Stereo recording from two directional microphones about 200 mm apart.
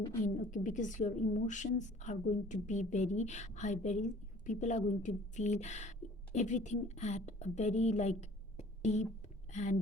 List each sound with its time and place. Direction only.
0.5 s a woman's voice: 40° left (ahead or behind)
8.5 s a sound: 35° left (ahead or behind)
9.5 s speech: 35° left (ahead or behind)